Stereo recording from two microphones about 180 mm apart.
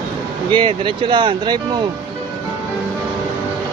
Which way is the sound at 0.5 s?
25° right (ahead or behind).